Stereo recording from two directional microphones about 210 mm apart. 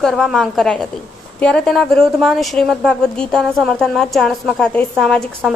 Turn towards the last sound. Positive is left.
turn(degrees=0)  # may be behind; listen again after turning